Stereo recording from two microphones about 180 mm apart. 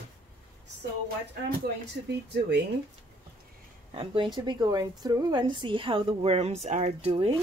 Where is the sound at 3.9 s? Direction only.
25° right (ahead or behind).